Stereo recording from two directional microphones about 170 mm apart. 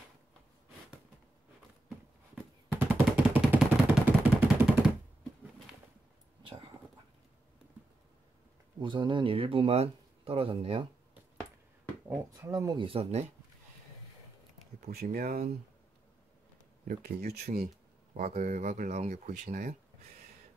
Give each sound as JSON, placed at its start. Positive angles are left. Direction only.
{"t": 2.9, "sound": "gunshot", "side_deg": -10}
{"t": 8.8, "sound": "speech", "side_deg": -30}
{"t": 12.1, "sound": "speech", "side_deg": -20}
{"t": 15.0, "sound": "speech", "side_deg": -60}
{"t": 16.8, "sound": "speech", "side_deg": -65}
{"t": 18.2, "sound": "speech", "side_deg": -40}